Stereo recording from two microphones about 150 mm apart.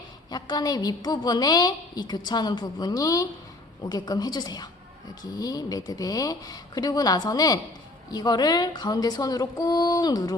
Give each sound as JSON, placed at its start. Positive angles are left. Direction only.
{"t": 0.3, "sound": "a woman's voice", "side_deg": 30}